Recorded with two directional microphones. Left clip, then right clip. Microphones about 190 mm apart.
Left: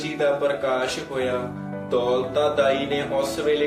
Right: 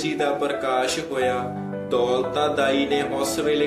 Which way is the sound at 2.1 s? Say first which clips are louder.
Left 1 dB; 30° right (ahead or behind).